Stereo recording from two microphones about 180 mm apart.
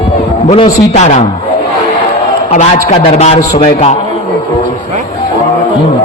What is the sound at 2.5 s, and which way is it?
A man's voice, 35° left (ahead or behind).